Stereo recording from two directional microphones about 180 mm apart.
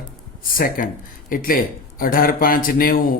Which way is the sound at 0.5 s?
50° left (ahead or behind).